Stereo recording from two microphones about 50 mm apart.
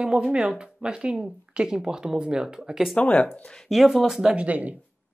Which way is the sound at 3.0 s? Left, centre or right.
Left.